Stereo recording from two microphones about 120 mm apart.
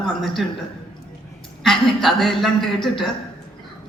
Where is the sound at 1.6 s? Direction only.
Centre (ahead or behind).